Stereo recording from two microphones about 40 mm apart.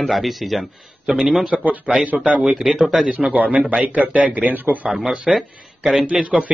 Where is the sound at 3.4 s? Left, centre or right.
Right.